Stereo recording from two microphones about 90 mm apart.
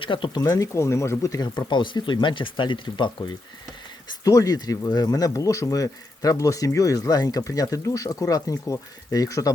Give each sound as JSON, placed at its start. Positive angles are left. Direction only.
{"t": 0.0, "sound": "speech", "side_deg": 65}
{"t": 0.3, "sound": "speech", "side_deg": 40}
{"t": 1.5, "sound": "speech", "side_deg": 65}
{"t": 4.2, "sound": "speech", "side_deg": 40}